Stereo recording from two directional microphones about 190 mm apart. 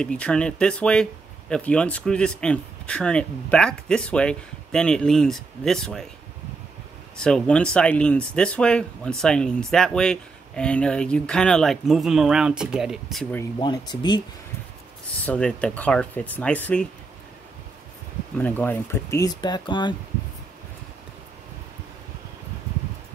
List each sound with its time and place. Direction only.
0.0 s speech: 5° left (ahead or behind)
7.2 s speech: 5° left (ahead or behind)
13.6 s speech: 25° left (ahead or behind)
15.2 s speech: 5° left (ahead or behind)
18.4 s speech: 10° left (ahead or behind)